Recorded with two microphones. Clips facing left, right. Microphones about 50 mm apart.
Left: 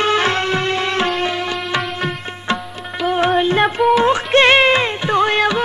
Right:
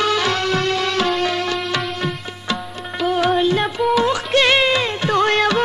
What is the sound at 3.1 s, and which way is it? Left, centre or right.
Music, left.